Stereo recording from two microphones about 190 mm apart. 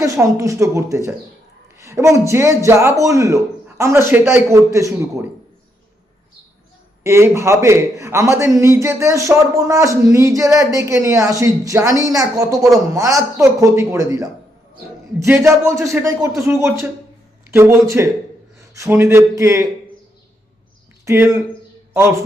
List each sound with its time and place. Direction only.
0.0 s a man's voice: 15° right (ahead or behind)
7.0 s a man's voice: 15° right (ahead or behind)
21.0 s speech: 15° right (ahead or behind)